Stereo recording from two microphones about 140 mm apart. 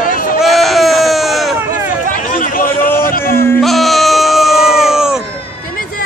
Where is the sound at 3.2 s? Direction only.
15° left (ahead or behind).